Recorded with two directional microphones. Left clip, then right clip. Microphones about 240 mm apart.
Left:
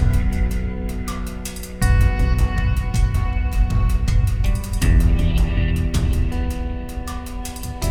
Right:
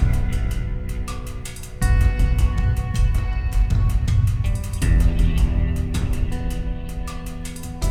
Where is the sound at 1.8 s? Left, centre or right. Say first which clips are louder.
Left 3 dB; centre.